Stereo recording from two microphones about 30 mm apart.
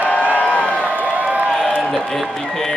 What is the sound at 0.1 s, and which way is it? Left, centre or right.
Crowd, left.